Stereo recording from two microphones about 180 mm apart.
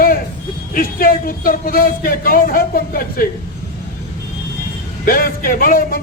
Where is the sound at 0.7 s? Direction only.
55° left (ahead or behind).